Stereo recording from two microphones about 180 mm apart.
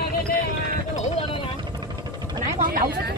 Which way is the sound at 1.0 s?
35° left (ahead or behind).